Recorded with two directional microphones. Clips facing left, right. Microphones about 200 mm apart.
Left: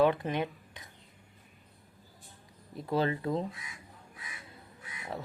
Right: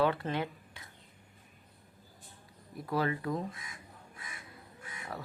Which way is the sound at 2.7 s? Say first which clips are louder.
Left 2 dB; 25° left (ahead or behind).